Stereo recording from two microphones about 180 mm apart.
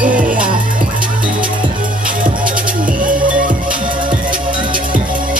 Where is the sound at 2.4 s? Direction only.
50° right (ahead or behind).